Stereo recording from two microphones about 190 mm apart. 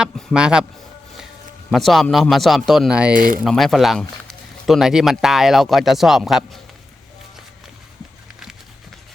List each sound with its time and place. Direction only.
0.0 s speech: centre (ahead or behind)
1.7 s speech: centre (ahead or behind)
3.2 s speech: 50° right (ahead or behind)
3.4 s speech: centre (ahead or behind)